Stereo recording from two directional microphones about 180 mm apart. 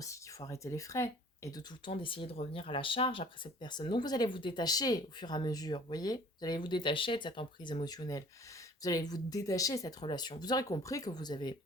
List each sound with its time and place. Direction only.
0.0 s speech: 20° left (ahead or behind)